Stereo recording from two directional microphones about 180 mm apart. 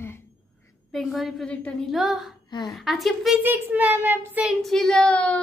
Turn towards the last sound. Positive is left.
turn(degrees=5)  # may be behind; listen again after turning